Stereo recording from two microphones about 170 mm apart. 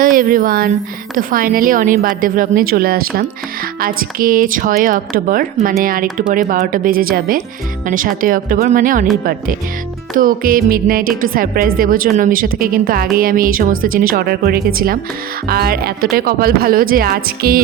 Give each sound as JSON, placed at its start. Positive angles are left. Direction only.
{"t": 0.0, "sound": "a woman's voice", "side_deg": -55}
{"t": 10.2, "sound": "a woman's voice", "side_deg": -55}